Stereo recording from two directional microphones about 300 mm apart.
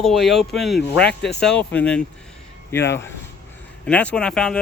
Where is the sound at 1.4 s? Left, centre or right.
Centre.